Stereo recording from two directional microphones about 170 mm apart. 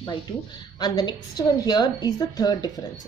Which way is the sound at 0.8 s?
25° left (ahead or behind).